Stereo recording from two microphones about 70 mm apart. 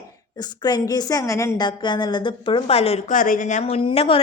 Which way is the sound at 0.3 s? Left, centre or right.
Left.